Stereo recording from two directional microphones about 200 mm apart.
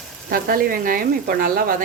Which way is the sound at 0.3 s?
45° right (ahead or behind).